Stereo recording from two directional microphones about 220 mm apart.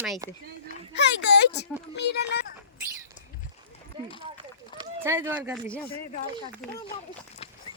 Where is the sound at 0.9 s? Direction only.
50° left (ahead or behind).